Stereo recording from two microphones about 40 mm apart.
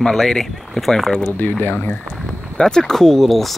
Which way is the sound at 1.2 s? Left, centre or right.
Left.